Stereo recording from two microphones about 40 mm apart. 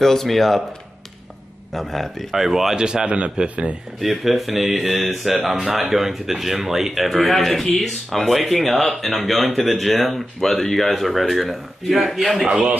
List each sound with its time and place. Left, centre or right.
0.0 s speech: centre
1.7 s speech: centre
2.3 s speech: centre
2.8 s speech: right
3.4 s speech: right
4.0 s speech: centre